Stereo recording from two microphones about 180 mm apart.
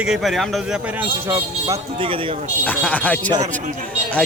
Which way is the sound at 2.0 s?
30° right (ahead or behind).